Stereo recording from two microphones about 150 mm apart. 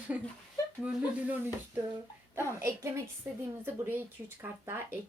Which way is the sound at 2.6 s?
20° right (ahead or behind).